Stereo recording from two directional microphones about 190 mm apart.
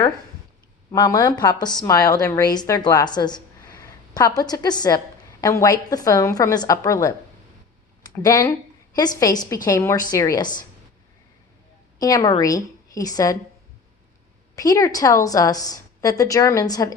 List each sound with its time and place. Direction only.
0.9 s a woman's voice: 20° left (ahead or behind)
8.1 s a woman's voice: 15° left (ahead or behind)
11.9 s a woman's voice: 20° left (ahead or behind)
14.5 s a woman's voice: 15° left (ahead or behind)